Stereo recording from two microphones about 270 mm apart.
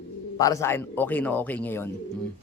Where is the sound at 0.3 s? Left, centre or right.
Centre.